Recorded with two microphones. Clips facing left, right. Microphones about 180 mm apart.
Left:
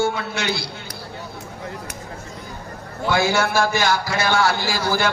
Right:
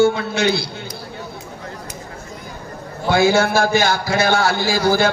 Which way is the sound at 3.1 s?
35° right (ahead or behind).